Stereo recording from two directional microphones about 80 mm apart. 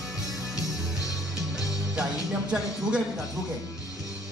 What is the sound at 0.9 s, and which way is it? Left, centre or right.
Music, left.